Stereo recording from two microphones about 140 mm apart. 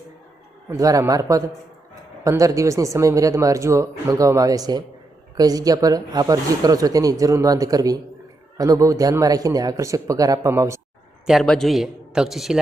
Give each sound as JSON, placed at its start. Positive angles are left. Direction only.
{"t": 0.7, "sound": "speech", "side_deg": -25}
{"t": 11.3, "sound": "a man's voice", "side_deg": 0}